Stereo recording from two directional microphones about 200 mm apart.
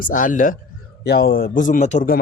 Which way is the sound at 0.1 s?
40° left (ahead or behind).